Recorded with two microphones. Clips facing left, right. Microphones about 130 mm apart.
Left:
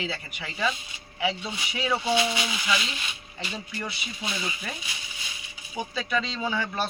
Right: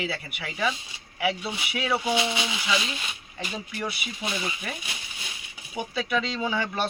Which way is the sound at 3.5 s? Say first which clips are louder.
Right 3 dB; 10° right (ahead or behind).